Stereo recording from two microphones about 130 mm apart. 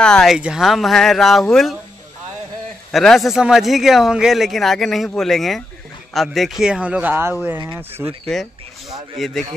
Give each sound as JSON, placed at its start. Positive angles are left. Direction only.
{"t": 0.0, "sound": "a man's voice", "side_deg": 5}
{"t": 2.9, "sound": "a man's voice", "side_deg": 0}
{"t": 9.2, "sound": "a man's voice", "side_deg": 0}